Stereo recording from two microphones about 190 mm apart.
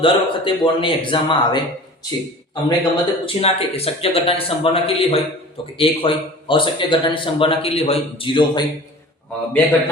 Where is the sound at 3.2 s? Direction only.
30° left (ahead or behind).